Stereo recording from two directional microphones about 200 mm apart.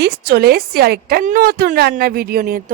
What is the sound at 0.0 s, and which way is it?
A woman's voice, 50° right (ahead or behind).